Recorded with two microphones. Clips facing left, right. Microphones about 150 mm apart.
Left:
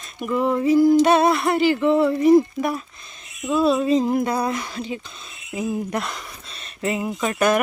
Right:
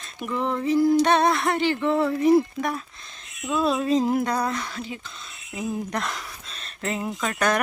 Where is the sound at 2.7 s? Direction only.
5° left (ahead or behind).